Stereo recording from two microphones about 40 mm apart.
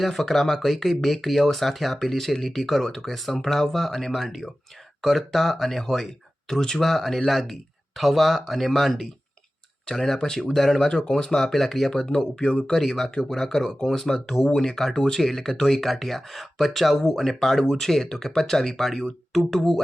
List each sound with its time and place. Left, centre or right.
0.0 s speech: centre
11.5 s speech: centre
11.9 s speech: left; by 16.9 s centre
16.9 s speech: centre